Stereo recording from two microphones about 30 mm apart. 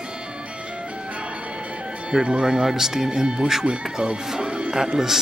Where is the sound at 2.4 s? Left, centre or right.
Right.